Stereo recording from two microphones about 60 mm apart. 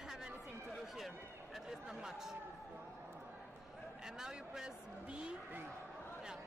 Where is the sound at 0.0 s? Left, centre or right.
Centre.